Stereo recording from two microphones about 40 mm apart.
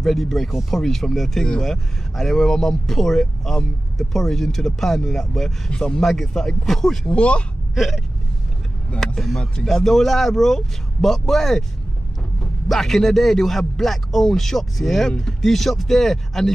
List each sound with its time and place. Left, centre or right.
0.0 s a man's voice: centre
5.7 s speech: left
5.9 s speech: centre
7.1 s speech: left
7.7 s gasp: centre
9.0 s a man's voice: centre
12.6 s speech: centre